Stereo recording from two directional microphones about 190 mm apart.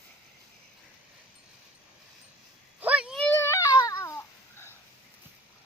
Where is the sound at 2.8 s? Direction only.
5° right (ahead or behind).